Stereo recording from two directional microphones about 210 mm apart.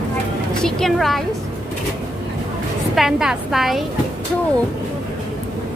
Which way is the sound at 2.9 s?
Centre (ahead or behind).